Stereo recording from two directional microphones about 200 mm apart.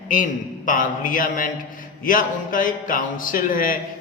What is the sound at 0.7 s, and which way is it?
A man's voice, 40° left (ahead or behind).